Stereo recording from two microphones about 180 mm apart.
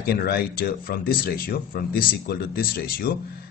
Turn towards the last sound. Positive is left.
turn(degrees=55)  # may be behind; listen again after turning